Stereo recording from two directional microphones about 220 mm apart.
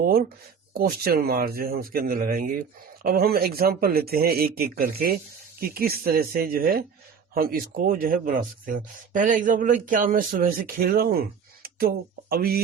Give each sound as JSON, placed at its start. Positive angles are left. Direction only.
{"t": 0.0, "sound": "a man's voice", "side_deg": -45}